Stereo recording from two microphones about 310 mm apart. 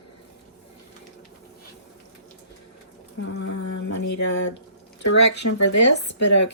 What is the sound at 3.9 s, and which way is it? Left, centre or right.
Speech, left.